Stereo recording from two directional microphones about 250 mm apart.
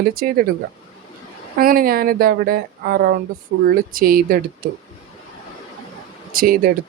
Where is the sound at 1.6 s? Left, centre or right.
Right.